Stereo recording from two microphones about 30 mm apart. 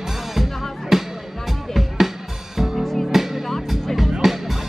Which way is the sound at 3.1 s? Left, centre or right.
Centre.